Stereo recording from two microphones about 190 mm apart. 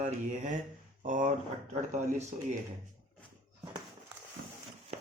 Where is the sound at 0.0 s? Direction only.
40° right (ahead or behind).